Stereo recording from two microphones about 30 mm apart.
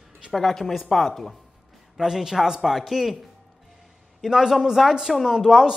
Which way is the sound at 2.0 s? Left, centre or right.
Centre.